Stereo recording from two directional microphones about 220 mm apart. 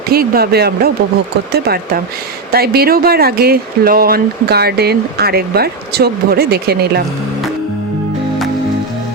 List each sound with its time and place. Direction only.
0.1 s speech: 45° right (ahead or behind)